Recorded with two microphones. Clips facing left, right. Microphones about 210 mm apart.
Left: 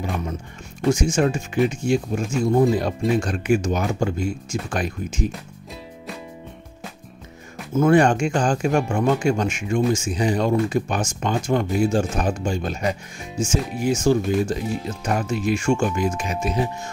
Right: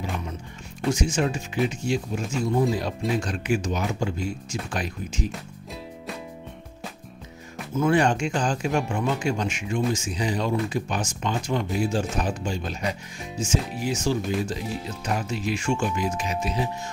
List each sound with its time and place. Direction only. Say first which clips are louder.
0.9 s speech: left 5 dB; 50° left (ahead or behind)
7.7 s speech: left 5 dB; 50° left (ahead or behind)